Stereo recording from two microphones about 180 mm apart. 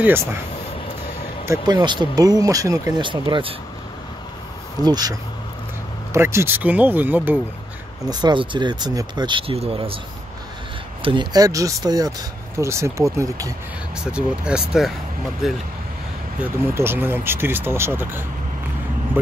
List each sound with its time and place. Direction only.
0.0 s speech: 15° right (ahead or behind)
1.4 s speech: 20° right (ahead or behind)
4.8 s speech: 20° right (ahead or behind)
6.1 s speech: 15° right (ahead or behind)
8.1 s speech: 25° right (ahead or behind)
11.0 s speech: 30° right (ahead or behind)
14.1 s speech: 5° right (ahead or behind)
16.3 s speech: 10° right (ahead or behind)